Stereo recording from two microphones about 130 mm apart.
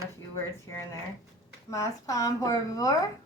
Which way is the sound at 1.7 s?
25° left (ahead or behind).